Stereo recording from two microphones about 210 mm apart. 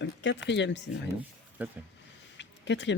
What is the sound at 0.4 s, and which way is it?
Speech, 55° left (ahead or behind).